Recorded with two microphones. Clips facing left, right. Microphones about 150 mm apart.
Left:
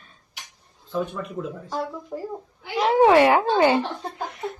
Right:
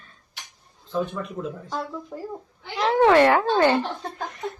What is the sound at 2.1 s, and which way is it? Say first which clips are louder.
A child's voice: left 2 dB; 10° left (ahead or behind).